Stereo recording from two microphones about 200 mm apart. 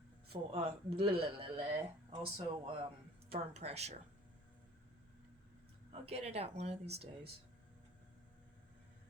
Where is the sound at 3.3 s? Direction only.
30° right (ahead or behind).